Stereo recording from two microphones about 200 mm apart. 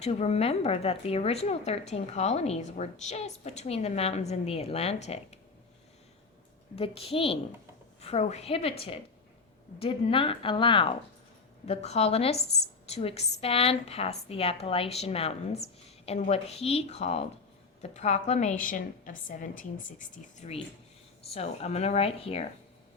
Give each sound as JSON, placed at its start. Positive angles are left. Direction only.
{"t": 0.0, "sound": "speech", "side_deg": 30}
{"t": 6.7, "sound": "a woman's voice", "side_deg": 30}
{"t": 9.7, "sound": "a woman's voice", "side_deg": 25}
{"t": 21.2, "sound": "speech", "side_deg": 30}